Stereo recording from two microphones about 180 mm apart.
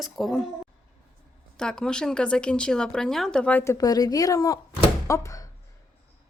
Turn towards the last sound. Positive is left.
turn(degrees=20)  # may be behind; listen again after turning